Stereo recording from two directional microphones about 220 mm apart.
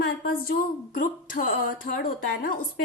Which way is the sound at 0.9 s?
40° left (ahead or behind).